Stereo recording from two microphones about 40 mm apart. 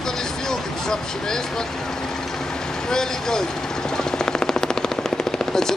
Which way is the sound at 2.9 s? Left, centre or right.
Centre.